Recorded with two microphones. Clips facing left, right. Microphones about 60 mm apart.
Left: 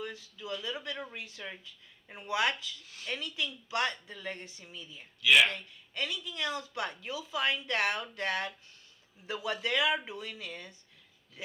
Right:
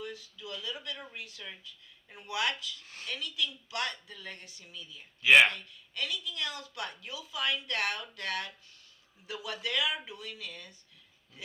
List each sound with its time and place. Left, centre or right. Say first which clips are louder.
0.0 s a woman's voice: left 1 dB; left
2.8 s a woman's voice: right 2 dB; right
3.1 s a woman's voice: even; left
5.2 s speech: right 3 dB; right
5.5 s a woman's voice: left 1 dB; left